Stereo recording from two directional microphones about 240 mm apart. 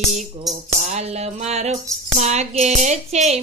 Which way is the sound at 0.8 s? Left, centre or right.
Right.